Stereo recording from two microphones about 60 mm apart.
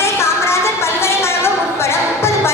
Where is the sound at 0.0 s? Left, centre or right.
Left.